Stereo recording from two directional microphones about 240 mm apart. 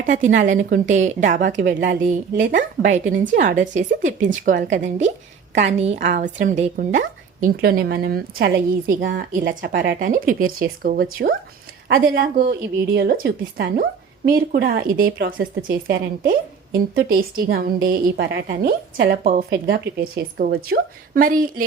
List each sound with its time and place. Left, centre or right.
0.0 s a woman's voice: right